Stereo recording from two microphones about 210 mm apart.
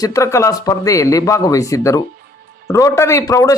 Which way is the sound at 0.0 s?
15° left (ahead or behind).